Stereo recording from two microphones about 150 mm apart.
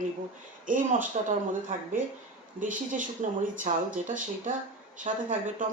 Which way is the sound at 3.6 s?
60° right (ahead or behind).